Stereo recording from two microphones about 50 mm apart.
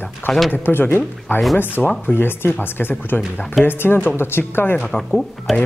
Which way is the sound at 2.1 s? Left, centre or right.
Left.